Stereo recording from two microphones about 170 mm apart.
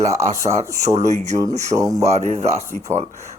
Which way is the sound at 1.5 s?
40° right (ahead or behind).